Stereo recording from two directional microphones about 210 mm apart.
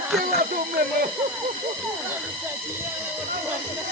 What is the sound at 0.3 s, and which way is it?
Speech, 40° right (ahead or behind).